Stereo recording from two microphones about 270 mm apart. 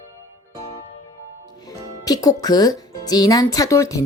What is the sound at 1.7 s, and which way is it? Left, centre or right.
Speech, centre.